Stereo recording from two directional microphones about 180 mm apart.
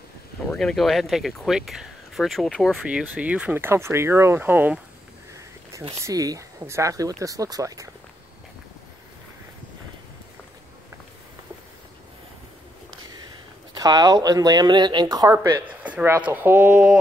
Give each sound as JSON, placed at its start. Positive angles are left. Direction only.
{"t": 0.5, "sound": "speech", "side_deg": 5}
{"t": 5.9, "sound": "speech", "side_deg": -15}
{"t": 13.7, "sound": "speech", "side_deg": -20}